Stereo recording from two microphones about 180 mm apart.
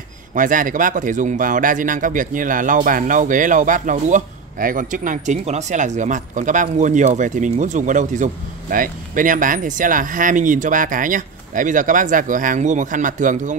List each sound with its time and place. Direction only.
0.3 s speech: 45° right (ahead or behind)